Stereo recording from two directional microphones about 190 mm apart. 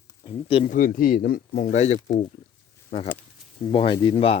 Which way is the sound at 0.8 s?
45° left (ahead or behind).